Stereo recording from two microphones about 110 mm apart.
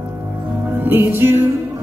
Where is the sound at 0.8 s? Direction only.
20° right (ahead or behind).